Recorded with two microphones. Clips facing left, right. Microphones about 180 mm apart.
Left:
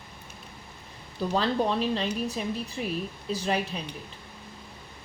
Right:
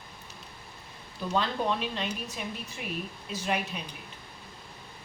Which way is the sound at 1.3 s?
35° left (ahead or behind).